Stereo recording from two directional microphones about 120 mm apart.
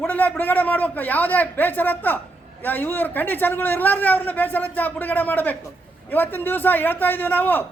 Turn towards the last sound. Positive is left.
turn(degrees=15)  # may be behind; listen again after turning